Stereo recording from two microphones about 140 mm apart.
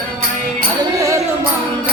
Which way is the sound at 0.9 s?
25° right (ahead or behind).